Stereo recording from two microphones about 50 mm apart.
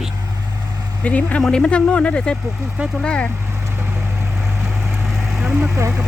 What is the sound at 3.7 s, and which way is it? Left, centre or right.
Vehicle, right.